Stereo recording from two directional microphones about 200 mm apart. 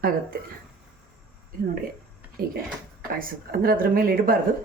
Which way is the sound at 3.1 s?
45° right (ahead or behind).